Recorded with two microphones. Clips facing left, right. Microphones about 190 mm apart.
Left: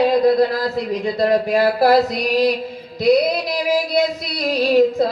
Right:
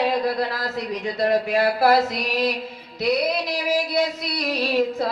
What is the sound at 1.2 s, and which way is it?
Speech, 35° left (ahead or behind).